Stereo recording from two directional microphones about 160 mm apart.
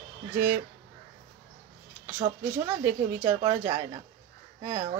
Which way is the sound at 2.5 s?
15° right (ahead or behind).